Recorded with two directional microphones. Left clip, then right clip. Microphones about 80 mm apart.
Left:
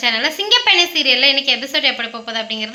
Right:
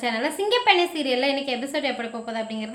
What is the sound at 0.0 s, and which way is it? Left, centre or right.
A woman's voice, right.